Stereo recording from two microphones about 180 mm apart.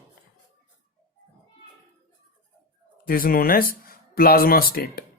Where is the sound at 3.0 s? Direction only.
55° left (ahead or behind).